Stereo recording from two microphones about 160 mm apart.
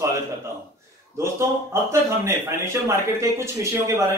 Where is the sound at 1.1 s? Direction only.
20° right (ahead or behind).